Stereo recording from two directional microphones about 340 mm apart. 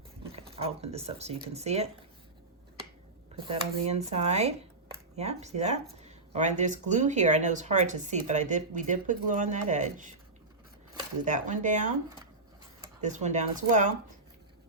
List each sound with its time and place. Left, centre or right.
0.3 s speech: centre
3.3 s speech: centre
11.3 s speech: right
13.0 s speech: right